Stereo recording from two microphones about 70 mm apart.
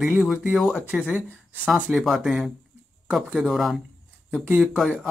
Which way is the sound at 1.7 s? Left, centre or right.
Centre.